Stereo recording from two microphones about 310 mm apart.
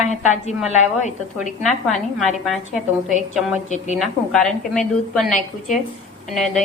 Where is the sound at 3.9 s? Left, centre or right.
Centre.